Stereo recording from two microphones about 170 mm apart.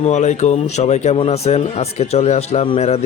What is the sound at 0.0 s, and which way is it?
Speech, 45° left (ahead or behind).